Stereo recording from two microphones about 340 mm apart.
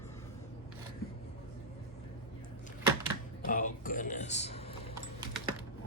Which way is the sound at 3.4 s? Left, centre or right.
Left.